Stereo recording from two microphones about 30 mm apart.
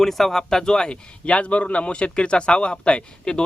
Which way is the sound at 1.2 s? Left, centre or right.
Left.